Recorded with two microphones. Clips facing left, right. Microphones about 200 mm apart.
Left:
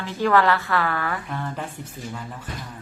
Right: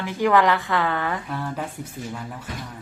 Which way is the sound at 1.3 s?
5° right (ahead or behind).